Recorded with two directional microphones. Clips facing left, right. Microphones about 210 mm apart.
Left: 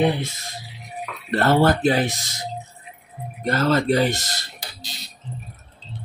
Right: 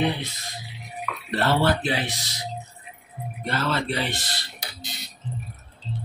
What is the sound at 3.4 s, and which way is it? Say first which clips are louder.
Speech: left 7 dB; 40° left (ahead or behind).